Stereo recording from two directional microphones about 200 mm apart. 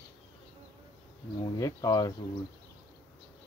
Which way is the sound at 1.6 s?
20° left (ahead or behind).